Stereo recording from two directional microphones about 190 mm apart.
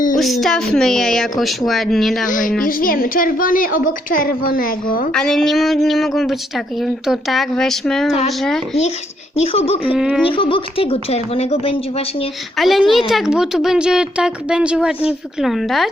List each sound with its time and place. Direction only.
0.2 s speech: centre (ahead or behind)
2.2 s a woman's voice: 45° left (ahead or behind)
5.1 s speech: 5° left (ahead or behind)
9.3 s a woman's voice: 30° left (ahead or behind)
9.8 s speech: 5° right (ahead or behind)
10.2 s a woman's voice: 25° left (ahead or behind)
12.5 s speech: centre (ahead or behind)